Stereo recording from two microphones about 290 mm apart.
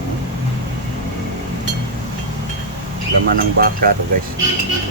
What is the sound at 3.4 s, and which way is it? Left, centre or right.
Speech, right.